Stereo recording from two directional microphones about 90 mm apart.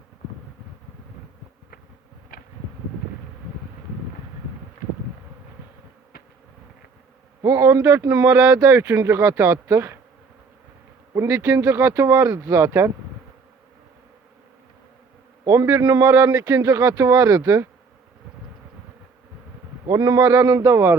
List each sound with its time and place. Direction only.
7.4 s a man's voice: 30° right (ahead or behind)
11.1 s speech: 30° right (ahead or behind)
15.4 s speech: 35° right (ahead or behind)
19.9 s speech: 40° right (ahead or behind)